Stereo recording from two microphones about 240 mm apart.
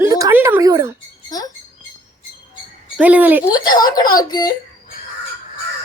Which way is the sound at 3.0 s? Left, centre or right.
Centre.